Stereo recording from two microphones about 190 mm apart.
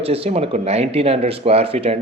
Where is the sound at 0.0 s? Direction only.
30° right (ahead or behind).